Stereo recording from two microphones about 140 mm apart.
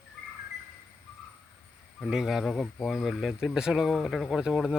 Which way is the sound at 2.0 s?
Centre (ahead or behind).